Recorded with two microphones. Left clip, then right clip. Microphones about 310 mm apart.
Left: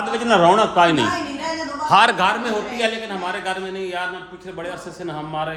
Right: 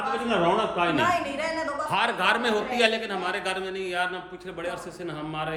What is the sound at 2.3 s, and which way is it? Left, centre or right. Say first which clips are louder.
A man's voice: left 2 dB; centre.